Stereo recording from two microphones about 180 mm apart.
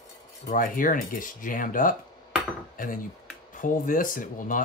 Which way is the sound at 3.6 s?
50° left (ahead or behind).